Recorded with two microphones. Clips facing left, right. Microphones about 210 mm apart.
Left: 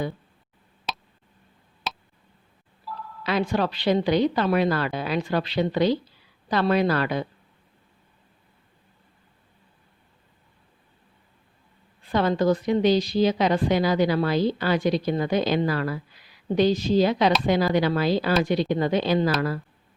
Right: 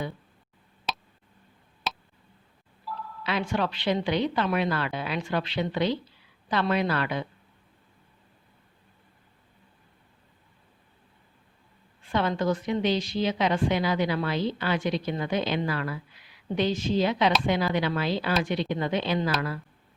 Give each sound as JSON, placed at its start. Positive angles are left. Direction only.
{"t": 0.9, "sound": "tick", "side_deg": 0}
{"t": 2.8, "sound": "a sound", "side_deg": 0}
{"t": 3.2, "sound": "a woman's voice", "side_deg": 40}
{"t": 12.0, "sound": "a woman's voice", "side_deg": 35}